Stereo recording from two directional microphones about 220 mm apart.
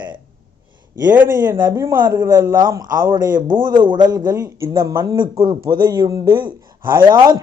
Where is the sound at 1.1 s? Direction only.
10° right (ahead or behind).